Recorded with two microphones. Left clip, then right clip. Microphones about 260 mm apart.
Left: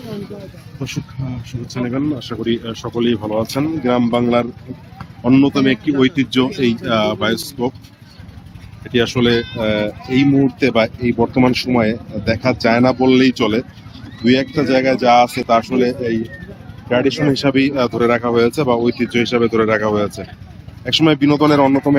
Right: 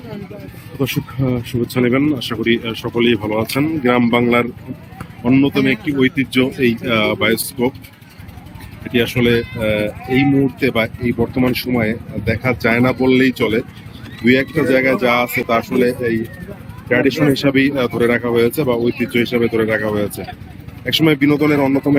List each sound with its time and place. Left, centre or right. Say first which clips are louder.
1.5 s speech: right 6 dB; centre
2.1 s speech: right 4 dB; centre
8.9 s speech: even; centre